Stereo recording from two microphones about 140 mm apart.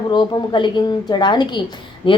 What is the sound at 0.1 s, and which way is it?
Speech, 35° left (ahead or behind).